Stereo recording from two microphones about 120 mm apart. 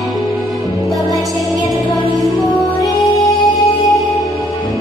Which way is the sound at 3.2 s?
30° left (ahead or behind).